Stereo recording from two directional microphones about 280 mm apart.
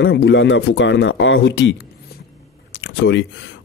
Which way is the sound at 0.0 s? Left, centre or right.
Left.